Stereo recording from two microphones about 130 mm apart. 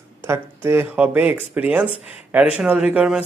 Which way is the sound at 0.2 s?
20° right (ahead or behind).